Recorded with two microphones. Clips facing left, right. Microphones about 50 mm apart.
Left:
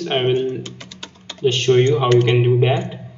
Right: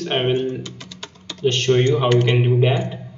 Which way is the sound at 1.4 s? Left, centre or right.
Centre.